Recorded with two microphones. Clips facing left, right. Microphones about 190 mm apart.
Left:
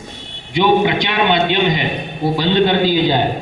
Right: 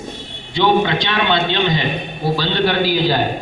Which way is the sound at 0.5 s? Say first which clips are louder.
Left 2 dB; 15° left (ahead or behind).